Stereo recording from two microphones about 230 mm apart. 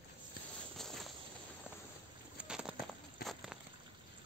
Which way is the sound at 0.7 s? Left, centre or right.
Centre.